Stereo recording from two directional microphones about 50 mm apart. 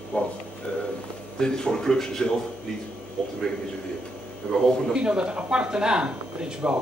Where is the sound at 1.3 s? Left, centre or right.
Centre.